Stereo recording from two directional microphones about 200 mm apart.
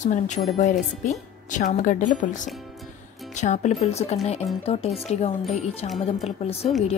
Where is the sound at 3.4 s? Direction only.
35° left (ahead or behind).